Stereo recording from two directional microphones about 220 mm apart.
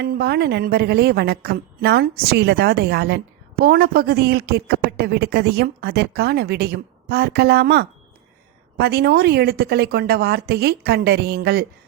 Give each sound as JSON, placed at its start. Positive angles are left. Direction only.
{"t": 0.0, "sound": "a woman's voice", "side_deg": -45}